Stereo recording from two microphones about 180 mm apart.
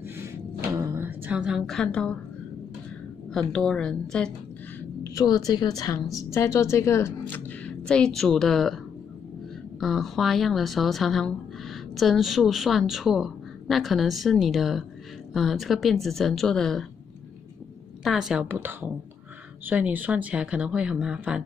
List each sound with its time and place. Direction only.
0.7 s music: 15° right (ahead or behind); by 2.1 s 5° left (ahead or behind)
3.3 s a woman's voice: 5° left (ahead or behind)
5.0 s a woman's voice: 20° left (ahead or behind); by 8.7 s centre (ahead or behind)
9.8 s a woman's voice: centre (ahead or behind)
18.0 s speech: centre (ahead or behind)